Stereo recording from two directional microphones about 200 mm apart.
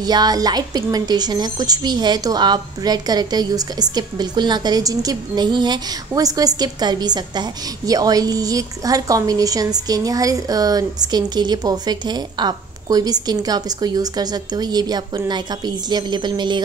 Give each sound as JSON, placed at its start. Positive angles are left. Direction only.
{"t": 0.0, "sound": "a woman's voice", "side_deg": -20}